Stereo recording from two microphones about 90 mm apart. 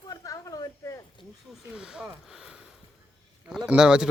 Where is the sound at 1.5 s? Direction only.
5° right (ahead or behind).